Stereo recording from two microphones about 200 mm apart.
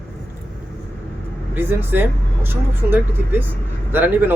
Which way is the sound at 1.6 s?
10° right (ahead or behind).